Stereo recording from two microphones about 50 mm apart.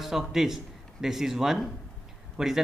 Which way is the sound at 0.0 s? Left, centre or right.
Centre.